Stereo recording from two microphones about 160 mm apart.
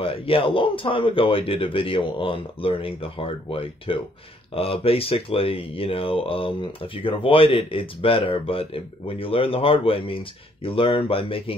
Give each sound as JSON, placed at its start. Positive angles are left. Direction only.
{"t": 0.0, "sound": "speech", "side_deg": 35}